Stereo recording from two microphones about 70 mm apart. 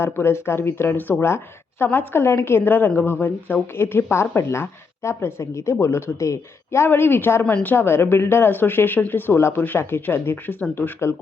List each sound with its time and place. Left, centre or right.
0.0 s a woman's voice: left